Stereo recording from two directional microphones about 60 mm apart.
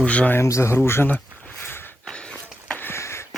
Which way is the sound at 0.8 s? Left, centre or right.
Left.